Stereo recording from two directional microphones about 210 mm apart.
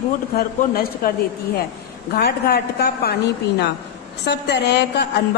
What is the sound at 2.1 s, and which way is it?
A woman's voice, 50° left (ahead or behind).